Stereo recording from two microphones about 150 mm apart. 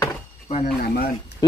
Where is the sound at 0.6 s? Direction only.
80° left.